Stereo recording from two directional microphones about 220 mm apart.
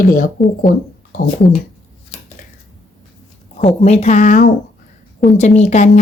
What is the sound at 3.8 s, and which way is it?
Speech, 30° left (ahead or behind).